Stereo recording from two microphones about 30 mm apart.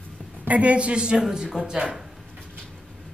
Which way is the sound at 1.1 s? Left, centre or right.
Right.